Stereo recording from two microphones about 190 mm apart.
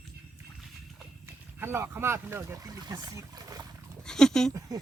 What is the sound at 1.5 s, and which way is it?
Speech, 10° right (ahead or behind).